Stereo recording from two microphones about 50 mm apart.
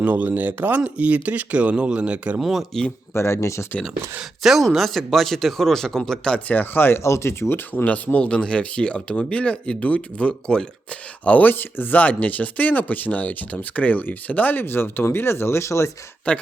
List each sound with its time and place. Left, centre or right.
0.0 s speech: right
2.4 s speech: centre
3.2 s speech: left
4.4 s speech: centre
6.5 s speech: left
7.0 s speech: left
7.9 s speech: left
11.3 s speech: left
16.3 s speech: left